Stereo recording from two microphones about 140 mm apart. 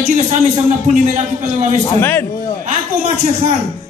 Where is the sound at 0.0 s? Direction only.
55° right (ahead or behind).